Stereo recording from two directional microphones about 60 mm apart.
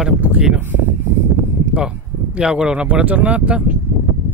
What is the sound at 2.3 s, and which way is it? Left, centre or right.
Speech, centre.